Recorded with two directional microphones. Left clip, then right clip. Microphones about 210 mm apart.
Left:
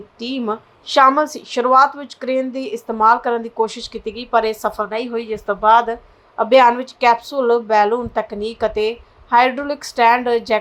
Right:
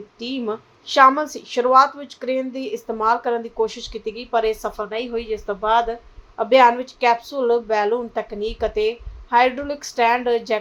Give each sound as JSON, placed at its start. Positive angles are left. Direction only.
{"t": 0.2, "sound": "a woman's voice", "side_deg": 15}